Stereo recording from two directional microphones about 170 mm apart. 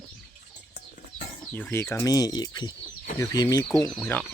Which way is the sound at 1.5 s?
10° left (ahead or behind).